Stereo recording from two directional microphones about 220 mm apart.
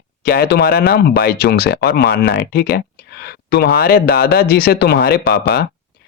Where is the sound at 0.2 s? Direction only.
45° left (ahead or behind).